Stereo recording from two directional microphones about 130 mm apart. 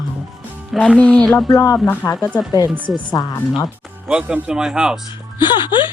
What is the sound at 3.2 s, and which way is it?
Speech, 40° left (ahead or behind).